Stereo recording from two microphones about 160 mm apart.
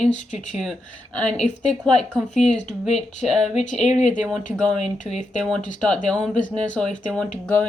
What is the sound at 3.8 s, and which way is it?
Speech, 45° left (ahead or behind).